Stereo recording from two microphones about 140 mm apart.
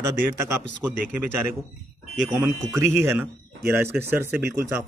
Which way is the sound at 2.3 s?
Centre (ahead or behind).